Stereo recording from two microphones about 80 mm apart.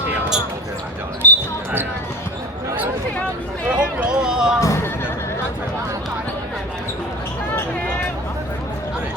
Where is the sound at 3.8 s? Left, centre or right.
Centre.